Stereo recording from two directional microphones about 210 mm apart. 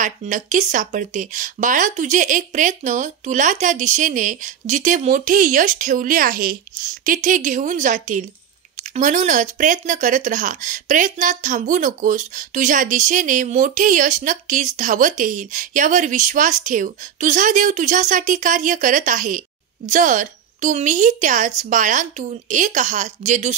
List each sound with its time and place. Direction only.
0.0 s speech: 35° right (ahead or behind)